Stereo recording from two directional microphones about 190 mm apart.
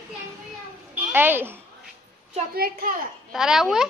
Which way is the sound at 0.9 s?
10° right (ahead or behind).